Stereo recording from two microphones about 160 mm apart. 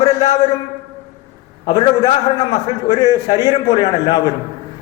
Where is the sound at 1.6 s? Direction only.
35° left (ahead or behind).